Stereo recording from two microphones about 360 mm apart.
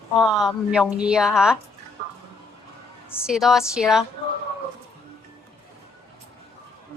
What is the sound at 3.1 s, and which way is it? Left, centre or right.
Speech, centre.